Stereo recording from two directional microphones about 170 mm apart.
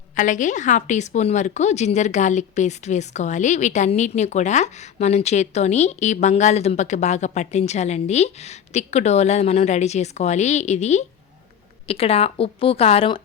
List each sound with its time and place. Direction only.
0.2 s a woman's voice: 45° left (ahead or behind)